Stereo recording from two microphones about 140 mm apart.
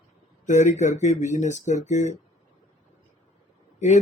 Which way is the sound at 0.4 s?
60° left (ahead or behind).